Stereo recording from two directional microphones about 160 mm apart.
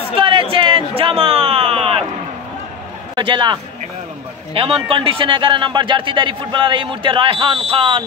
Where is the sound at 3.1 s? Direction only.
30° right (ahead or behind).